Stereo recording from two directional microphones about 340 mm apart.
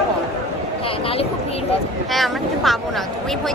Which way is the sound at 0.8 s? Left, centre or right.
Centre.